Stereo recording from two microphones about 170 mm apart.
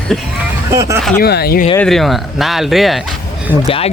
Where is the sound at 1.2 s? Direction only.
70° left (ahead or behind).